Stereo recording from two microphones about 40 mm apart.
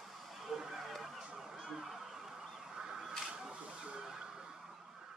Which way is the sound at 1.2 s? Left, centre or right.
Centre.